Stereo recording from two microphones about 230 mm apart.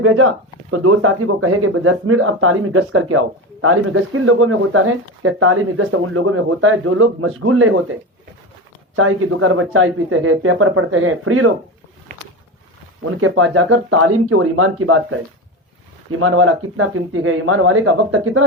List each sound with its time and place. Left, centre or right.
0.0 s speech: right
9.0 s speech: right
13.1 s speech: right
16.2 s speech: right